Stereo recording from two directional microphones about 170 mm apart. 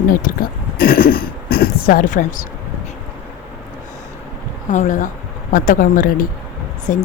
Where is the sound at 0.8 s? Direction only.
60° left (ahead or behind).